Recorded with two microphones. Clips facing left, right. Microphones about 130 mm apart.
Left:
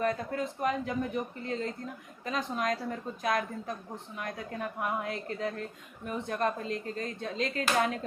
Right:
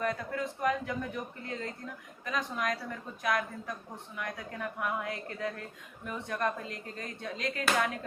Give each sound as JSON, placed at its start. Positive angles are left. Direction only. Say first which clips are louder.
{"t": 0.0, "sound": "speech", "louder": "left 2 dB", "side_deg": 30}